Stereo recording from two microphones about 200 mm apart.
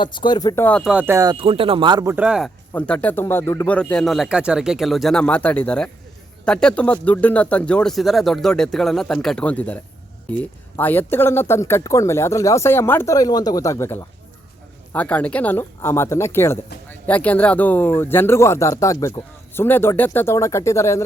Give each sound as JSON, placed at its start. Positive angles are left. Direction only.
{"t": 0.0, "sound": "speech", "side_deg": 20}
{"t": 2.1, "sound": "speech", "side_deg": -5}
{"t": 2.7, "sound": "speech", "side_deg": 5}